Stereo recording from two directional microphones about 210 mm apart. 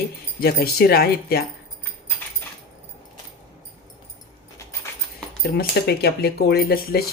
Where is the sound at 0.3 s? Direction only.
45° left (ahead or behind).